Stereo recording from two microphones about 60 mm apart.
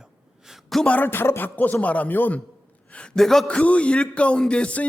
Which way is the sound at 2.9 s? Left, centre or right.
Centre.